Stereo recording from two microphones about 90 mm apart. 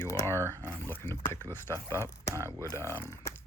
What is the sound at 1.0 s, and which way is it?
Speech, 25° left (ahead or behind).